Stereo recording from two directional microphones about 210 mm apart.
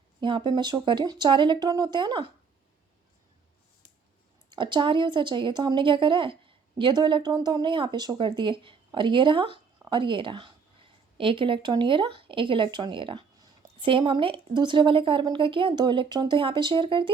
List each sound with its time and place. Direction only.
0.2 s speech: 20° right (ahead or behind)
4.5 s speech: 20° right (ahead or behind)